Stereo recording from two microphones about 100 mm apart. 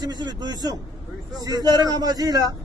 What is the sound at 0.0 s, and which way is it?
Speech, 45° right (ahead or behind).